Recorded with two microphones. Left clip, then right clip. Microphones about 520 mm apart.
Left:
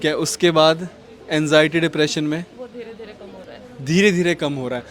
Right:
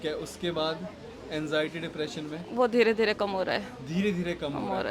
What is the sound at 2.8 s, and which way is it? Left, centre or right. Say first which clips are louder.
Speech: right 11 dB; right.